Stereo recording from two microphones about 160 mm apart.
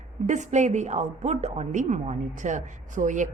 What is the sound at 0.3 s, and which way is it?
A woman's voice, 50° right (ahead or behind).